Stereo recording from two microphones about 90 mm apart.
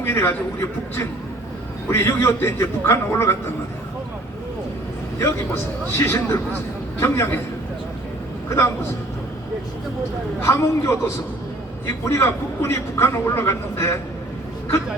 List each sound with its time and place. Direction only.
0.0 s a man's voice: 30° left (ahead or behind)
1.9 s a man's voice: 25° left (ahead or behind)
5.9 s a man's voice: 25° left (ahead or behind)
8.4 s a man's voice: 30° left (ahead or behind)
10.4 s a man's voice: 30° left (ahead or behind)